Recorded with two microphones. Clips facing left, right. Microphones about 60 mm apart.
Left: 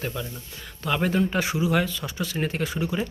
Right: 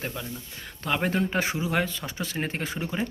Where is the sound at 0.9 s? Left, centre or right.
Right.